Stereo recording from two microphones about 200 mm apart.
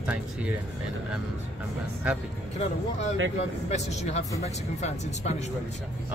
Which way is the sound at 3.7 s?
35° left (ahead or behind).